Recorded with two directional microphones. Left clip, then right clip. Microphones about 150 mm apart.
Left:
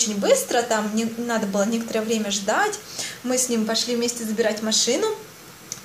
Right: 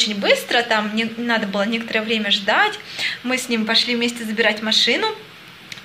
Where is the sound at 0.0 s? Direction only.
15° left (ahead or behind).